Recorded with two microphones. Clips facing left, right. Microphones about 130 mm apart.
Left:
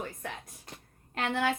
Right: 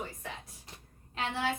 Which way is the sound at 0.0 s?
55° left (ahead or behind).